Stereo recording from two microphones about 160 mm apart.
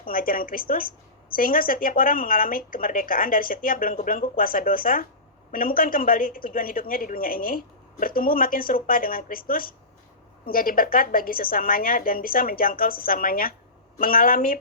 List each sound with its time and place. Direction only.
0.0 s a woman's voice: 60° left (ahead or behind)